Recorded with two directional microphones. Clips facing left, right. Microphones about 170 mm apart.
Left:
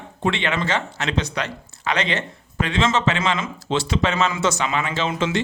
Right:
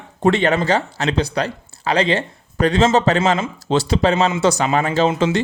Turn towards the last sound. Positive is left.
turn(degrees=-30)  # may be behind; listen again after turning